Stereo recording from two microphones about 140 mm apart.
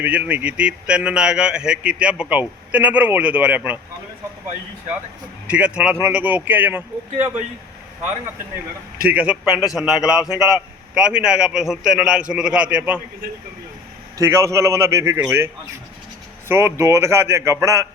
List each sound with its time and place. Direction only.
0.0 s a man's voice: 10° right (ahead or behind)
5.5 s a man's voice: 10° right (ahead or behind)
9.0 s a man's voice: 10° right (ahead or behind)
9.4 s a man's voice: 25° left (ahead or behind)
9.7 s a man's voice: 5° right (ahead or behind)
14.2 s a man's voice: 20° right (ahead or behind)
16.5 s a man's voice: 15° right (ahead or behind)